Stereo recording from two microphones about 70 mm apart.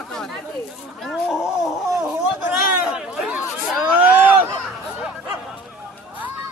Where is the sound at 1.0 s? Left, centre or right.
Centre.